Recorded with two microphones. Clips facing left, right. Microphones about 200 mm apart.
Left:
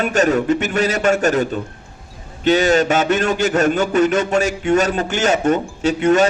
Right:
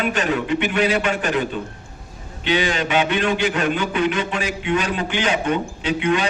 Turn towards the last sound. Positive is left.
turn(degrees=45)  # may be behind; listen again after turning